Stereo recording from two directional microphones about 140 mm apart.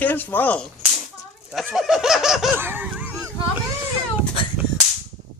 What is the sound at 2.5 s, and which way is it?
Laughter, 15° right (ahead or behind).